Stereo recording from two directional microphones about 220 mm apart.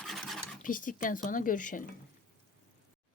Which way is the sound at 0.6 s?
35° left (ahead or behind).